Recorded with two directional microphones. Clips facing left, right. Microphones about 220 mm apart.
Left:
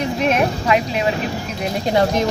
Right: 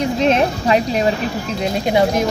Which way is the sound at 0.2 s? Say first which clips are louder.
Right 2 dB; 25° right (ahead or behind).